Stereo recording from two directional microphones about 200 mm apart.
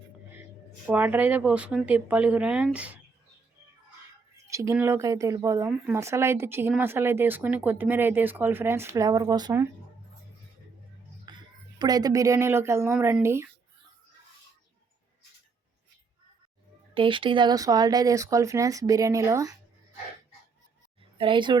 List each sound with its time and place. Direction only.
0.9 s speech: 10° right (ahead or behind)
4.4 s speech: 15° right (ahead or behind)
11.3 s a sound: 20° right (ahead or behind)
11.8 s speech: 20° right (ahead or behind)
16.9 s speech: 25° right (ahead or behind)
21.0 s a woman's voice: 25° right (ahead or behind)